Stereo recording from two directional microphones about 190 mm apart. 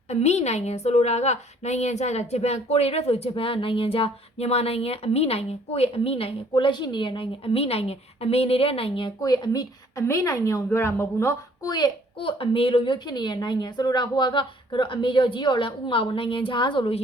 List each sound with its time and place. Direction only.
0.1 s a woman's voice: 35° left (ahead or behind)